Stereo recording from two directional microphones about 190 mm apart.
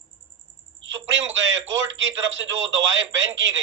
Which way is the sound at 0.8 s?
80° right.